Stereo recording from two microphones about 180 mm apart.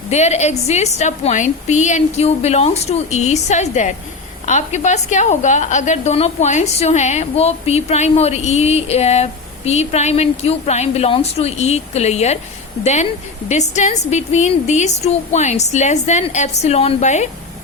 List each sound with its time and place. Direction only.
0.1 s a woman's voice: 40° left (ahead or behind)